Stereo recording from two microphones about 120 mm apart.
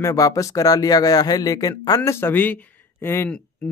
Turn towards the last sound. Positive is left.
turn(degrees=20)  # may be behind; listen again after turning